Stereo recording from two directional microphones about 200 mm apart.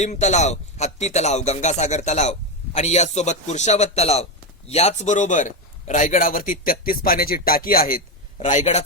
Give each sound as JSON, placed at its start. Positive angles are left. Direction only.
{"t": 0.0, "sound": "a man's voice", "side_deg": 35}